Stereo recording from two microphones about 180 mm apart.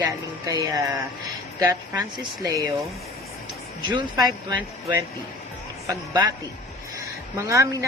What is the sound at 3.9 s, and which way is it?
Speech, 25° right (ahead or behind).